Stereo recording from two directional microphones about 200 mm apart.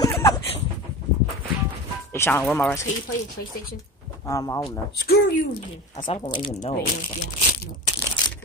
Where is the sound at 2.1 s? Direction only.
10° left (ahead or behind).